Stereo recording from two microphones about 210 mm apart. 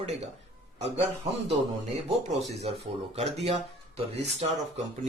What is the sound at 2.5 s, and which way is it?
Speech, 30° right (ahead or behind).